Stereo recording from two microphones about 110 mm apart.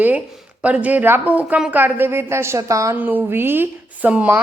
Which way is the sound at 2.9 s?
15° right (ahead or behind).